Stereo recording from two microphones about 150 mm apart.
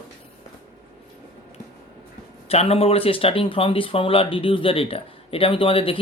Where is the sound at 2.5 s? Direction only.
40° left (ahead or behind).